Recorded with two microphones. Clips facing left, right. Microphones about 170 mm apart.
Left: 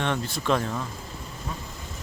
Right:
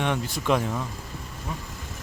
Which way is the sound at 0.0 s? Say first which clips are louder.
Right 1 dB; 10° right (ahead or behind).